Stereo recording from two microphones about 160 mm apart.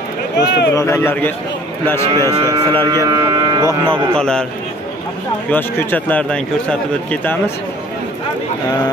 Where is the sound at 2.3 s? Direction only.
25° right (ahead or behind).